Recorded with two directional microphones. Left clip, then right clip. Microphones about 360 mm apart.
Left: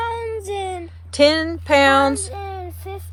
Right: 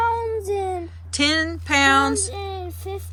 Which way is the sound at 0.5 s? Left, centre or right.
Left.